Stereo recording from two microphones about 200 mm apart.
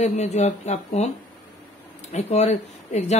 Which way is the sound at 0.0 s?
35° left (ahead or behind).